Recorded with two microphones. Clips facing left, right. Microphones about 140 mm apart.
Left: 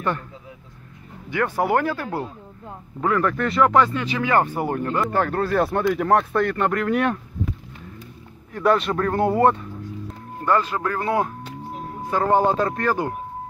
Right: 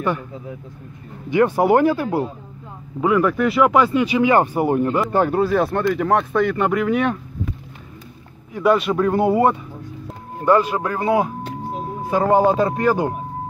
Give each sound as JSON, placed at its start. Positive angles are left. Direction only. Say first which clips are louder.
{"t": 1.3, "sound": "speech", "louder": "right 6 dB", "side_deg": -20}
{"t": 5.4, "sound": "speech", "louder": "right 2 dB", "side_deg": 0}
{"t": 8.5, "sound": "speech", "louder": "right 3 dB", "side_deg": -5}